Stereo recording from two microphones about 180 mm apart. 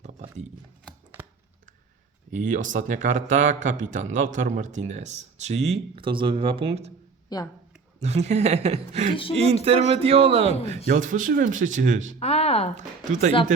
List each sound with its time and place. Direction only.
0.0 s a sound: 40° right (ahead or behind)
2.3 s speech: 45° right (ahead or behind)
7.3 s speech: 20° left (ahead or behind)
7.9 s speech: 40° right (ahead or behind)
10.8 s speech: 45° right (ahead or behind)
12.2 s a sound: 35° left (ahead or behind)
12.7 s speech: 40° right (ahead or behind)